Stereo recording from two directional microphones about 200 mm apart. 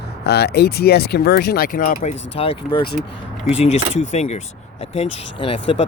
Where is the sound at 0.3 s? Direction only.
55° left (ahead or behind); by 4.4 s 35° left (ahead or behind).